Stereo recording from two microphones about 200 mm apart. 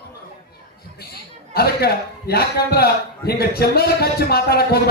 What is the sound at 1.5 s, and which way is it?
A man's voice, 50° left (ahead or behind).